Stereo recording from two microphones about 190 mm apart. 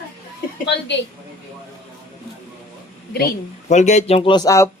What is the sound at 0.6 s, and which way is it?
Speech, 70° left (ahead or behind).